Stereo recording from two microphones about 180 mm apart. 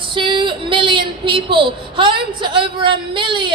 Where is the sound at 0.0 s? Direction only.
25° right (ahead or behind).